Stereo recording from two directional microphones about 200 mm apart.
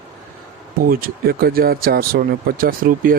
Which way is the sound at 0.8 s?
45° right (ahead or behind).